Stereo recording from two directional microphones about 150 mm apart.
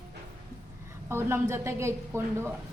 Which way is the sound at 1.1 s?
15° right (ahead or behind).